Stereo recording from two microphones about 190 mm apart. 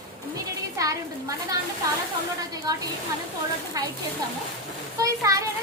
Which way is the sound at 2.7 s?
20° right (ahead or behind).